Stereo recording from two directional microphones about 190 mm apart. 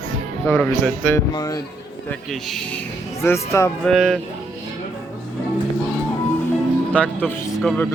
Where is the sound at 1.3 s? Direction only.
20° left (ahead or behind).